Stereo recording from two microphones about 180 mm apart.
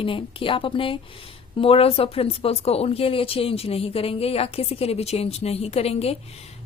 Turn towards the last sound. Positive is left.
turn(degrees=35)  # may be behind; listen again after turning